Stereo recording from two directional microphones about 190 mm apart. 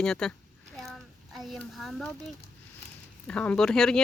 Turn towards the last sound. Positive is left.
turn(degrees=5)  # may be behind; listen again after turning